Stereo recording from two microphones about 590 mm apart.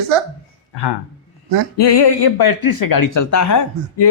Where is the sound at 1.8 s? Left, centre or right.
Left.